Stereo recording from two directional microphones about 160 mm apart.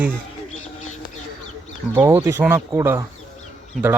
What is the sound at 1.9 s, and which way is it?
Speech, 15° right (ahead or behind).